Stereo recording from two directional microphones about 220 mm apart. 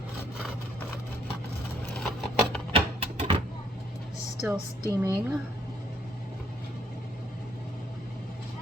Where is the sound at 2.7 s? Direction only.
25° right (ahead or behind).